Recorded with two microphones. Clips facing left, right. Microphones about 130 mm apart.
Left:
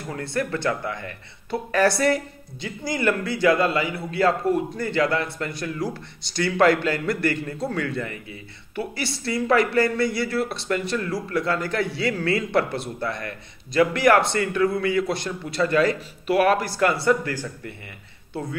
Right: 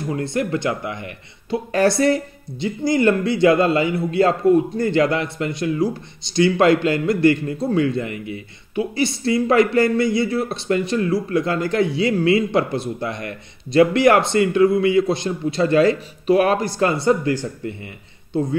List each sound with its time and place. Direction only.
0.1 s a man's voice: 20° right (ahead or behind)